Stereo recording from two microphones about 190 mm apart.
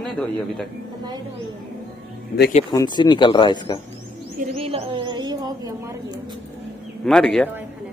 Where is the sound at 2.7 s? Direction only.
20° left (ahead or behind).